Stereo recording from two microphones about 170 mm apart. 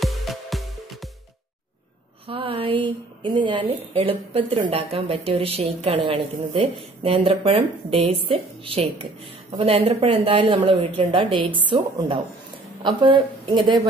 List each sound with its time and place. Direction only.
0.0 s music: centre (ahead or behind)
2.2 s a woman's voice: 30° right (ahead or behind)